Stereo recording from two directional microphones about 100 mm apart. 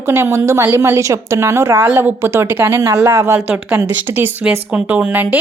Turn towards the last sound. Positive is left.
turn(degrees=-15)  # may be behind; listen again after turning